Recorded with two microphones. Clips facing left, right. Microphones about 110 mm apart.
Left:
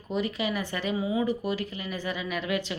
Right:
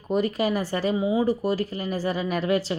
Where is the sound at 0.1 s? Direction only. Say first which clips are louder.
Right 6 dB; 45° right (ahead or behind).